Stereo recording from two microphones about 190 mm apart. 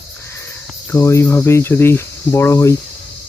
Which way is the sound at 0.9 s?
15° left (ahead or behind).